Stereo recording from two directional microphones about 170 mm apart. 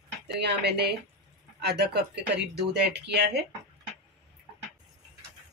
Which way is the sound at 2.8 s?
85° right.